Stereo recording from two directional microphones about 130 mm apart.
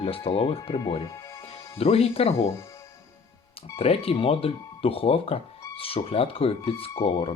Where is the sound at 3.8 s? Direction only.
50° left (ahead or behind).